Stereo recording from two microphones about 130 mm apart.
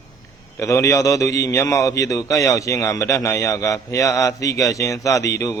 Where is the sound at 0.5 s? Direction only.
25° left (ahead or behind).